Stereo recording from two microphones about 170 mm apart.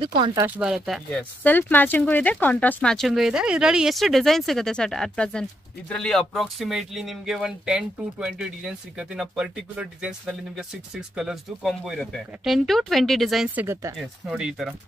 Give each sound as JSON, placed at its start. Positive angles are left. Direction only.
{"t": 0.0, "sound": "speech", "side_deg": -30}
{"t": 0.6, "sound": "speech", "side_deg": -5}